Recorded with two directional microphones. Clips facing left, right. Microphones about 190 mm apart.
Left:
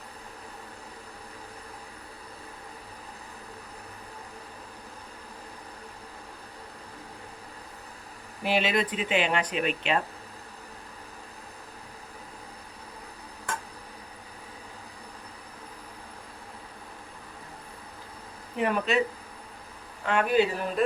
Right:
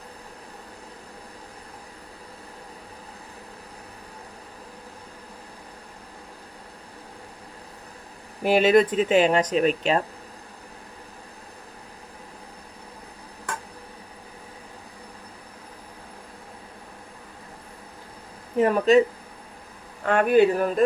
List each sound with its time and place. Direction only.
8.4 s speech: 45° right (ahead or behind)
18.5 s a sound: 40° right (ahead or behind)
20.1 s speech: 50° right (ahead or behind)